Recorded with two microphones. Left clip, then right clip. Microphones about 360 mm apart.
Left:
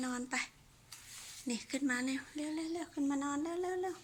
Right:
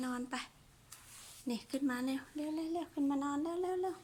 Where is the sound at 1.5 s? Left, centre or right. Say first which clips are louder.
Left 1 dB; centre.